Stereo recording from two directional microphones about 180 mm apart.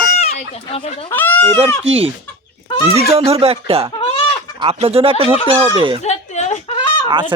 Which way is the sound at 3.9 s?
30° left (ahead or behind).